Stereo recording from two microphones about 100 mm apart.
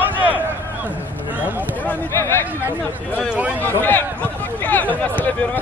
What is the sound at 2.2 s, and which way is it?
Chatter, 25° left (ahead or behind).